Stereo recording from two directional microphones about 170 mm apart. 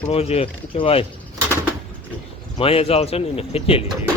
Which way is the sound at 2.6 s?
35° left (ahead or behind).